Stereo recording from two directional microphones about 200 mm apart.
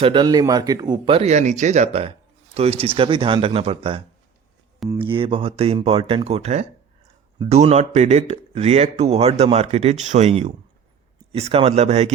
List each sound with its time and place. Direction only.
0.0 s speech: 25° right (ahead or behind)